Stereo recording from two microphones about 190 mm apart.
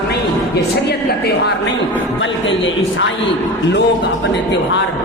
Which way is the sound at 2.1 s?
75° left (ahead or behind).